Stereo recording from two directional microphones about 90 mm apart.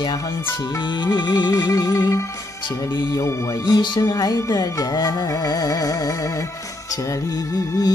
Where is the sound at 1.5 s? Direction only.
40° left (ahead or behind).